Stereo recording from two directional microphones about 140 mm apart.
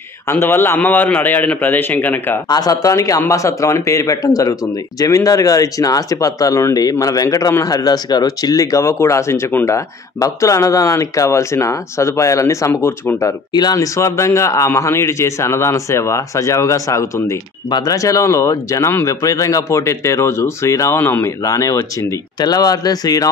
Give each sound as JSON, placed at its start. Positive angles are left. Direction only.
{"t": 0.3, "sound": "a man's voice", "side_deg": 15}
{"t": 2.4, "sound": "speech", "side_deg": 30}